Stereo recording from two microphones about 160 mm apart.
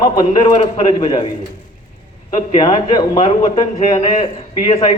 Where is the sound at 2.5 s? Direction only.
30° left (ahead or behind).